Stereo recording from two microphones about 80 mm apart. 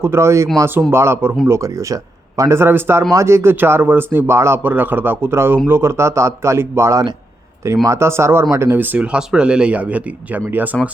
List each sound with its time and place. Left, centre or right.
0.0 s a man's voice: right
1.5 s a man's voice: right
8.8 s a man's voice: right
9.1 s a man's voice: centre